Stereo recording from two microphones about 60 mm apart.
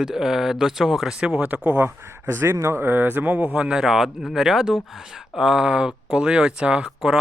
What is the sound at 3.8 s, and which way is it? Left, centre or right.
Speech, centre.